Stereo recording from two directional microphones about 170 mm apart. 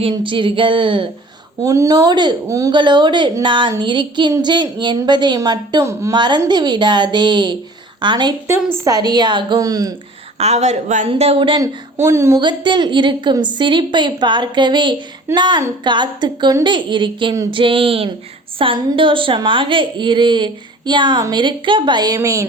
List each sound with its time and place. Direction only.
0.0 s a woman's voice: 30° right (ahead or behind)
1.6 s a woman's voice: 20° right (ahead or behind)
10.3 s a woman's voice: 40° right (ahead or behind)
11.1 s speech: 35° right (ahead or behind)
11.9 s speech: 15° right (ahead or behind)
12.4 s a woman's voice: 25° right (ahead or behind)